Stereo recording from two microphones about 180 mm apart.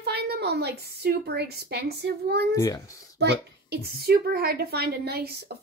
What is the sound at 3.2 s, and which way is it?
A child's voice, 65° right (ahead or behind).